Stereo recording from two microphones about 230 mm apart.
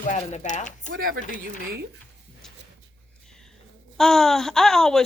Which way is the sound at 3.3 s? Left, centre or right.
Centre.